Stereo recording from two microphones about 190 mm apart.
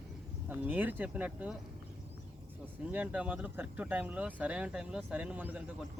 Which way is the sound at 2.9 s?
10° right (ahead or behind).